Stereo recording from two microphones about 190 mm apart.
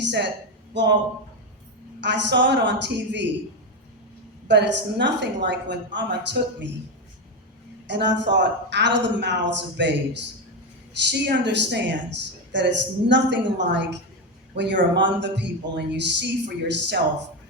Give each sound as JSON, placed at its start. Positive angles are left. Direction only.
{"t": 0.0, "sound": "a sound", "side_deg": -65}
{"t": 0.7, "sound": "speech", "side_deg": -70}
{"t": 2.0, "sound": "speech", "side_deg": -70}
{"t": 4.4, "sound": "speech", "side_deg": -65}
{"t": 7.9, "sound": "a woman's voice", "side_deg": -65}